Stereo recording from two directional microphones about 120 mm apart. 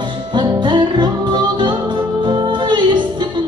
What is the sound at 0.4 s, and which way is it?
Music, 40° right (ahead or behind).